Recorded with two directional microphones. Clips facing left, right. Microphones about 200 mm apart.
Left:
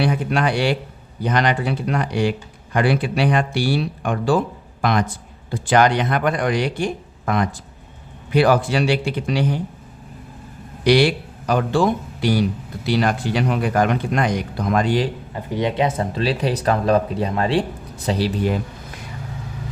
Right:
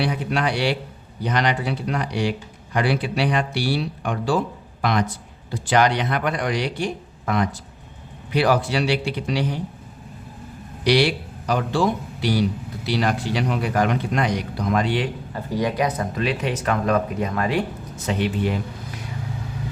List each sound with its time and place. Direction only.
0.0 s a man's voice: 50° left (ahead or behind)
10.8 s a man's voice: 50° left (ahead or behind)
15.3 s speech: 20° left (ahead or behind); by 18.3 s 35° left (ahead or behind)